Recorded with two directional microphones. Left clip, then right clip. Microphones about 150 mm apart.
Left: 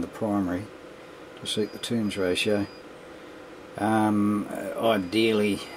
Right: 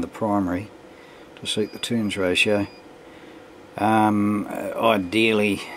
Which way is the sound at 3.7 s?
30° right (ahead or behind).